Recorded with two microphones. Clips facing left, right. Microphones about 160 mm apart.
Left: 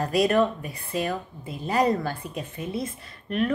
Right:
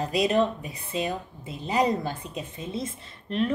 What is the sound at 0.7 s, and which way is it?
Speech, 20° right (ahead or behind).